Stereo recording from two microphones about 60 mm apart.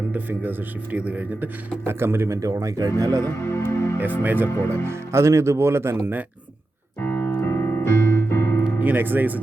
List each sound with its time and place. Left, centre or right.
0.1 s speech: right
3.4 s speech: left
3.9 s speech: right
4.9 s speech: right
7.0 s piano: left
7.3 s keyboard: left
8.8 s speech: right